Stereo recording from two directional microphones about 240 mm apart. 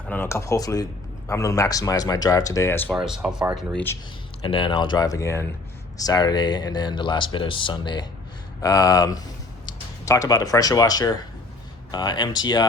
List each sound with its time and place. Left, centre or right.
0.1 s speech: centre
3.1 s speech: centre
4.4 s speech: left